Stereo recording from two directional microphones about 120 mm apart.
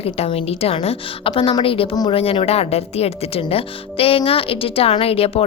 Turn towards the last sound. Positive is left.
turn(degrees=55)  # may be behind; listen again after turning